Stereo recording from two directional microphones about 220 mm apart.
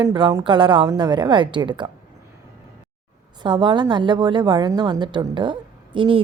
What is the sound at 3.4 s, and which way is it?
A woman's voice, 20° right (ahead or behind).